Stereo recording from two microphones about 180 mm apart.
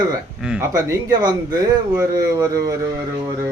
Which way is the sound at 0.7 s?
15° right (ahead or behind).